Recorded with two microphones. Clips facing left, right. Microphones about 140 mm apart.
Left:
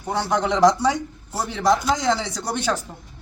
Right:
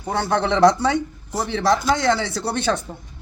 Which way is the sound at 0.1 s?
15° left (ahead or behind).